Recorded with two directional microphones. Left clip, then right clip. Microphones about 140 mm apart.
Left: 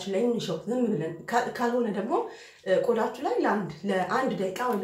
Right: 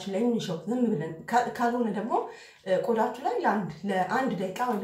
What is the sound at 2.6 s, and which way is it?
Speech, 10° left (ahead or behind).